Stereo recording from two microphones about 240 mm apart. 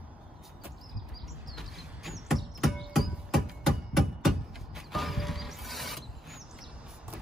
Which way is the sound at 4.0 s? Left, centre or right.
Centre.